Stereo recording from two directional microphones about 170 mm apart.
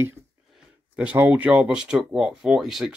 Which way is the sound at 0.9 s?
10° right (ahead or behind).